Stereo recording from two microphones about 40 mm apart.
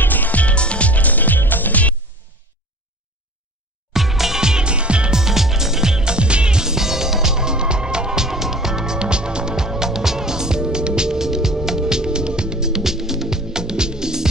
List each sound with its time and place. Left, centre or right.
0.0 s music: left
3.9 s music: centre; by 5.1 s right
5.1 s music: centre